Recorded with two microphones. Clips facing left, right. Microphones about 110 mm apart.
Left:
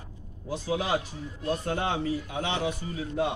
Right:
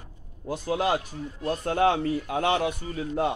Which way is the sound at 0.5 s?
55° right (ahead or behind).